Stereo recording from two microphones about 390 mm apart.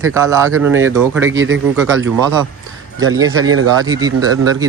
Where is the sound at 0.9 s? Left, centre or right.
Centre.